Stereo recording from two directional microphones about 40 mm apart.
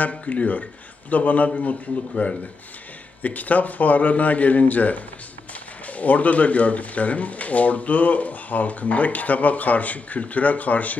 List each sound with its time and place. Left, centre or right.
0.1 s speech: left